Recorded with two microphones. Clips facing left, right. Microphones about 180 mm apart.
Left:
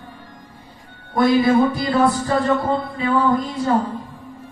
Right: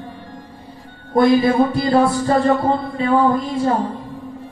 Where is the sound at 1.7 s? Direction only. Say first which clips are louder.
Right 2 dB; 30° right (ahead or behind).